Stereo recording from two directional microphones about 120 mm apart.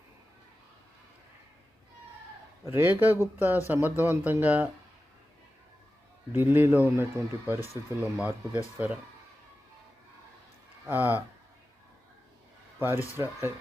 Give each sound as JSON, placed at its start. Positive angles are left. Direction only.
{"t": 2.6, "sound": "speech", "side_deg": -15}
{"t": 6.3, "sound": "speech", "side_deg": -20}
{"t": 10.8, "sound": "speech", "side_deg": -15}
{"t": 12.8, "sound": "speech", "side_deg": -20}